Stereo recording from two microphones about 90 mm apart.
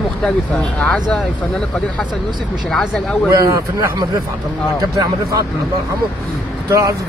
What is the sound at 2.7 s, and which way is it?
Speech, 5° left (ahead or behind).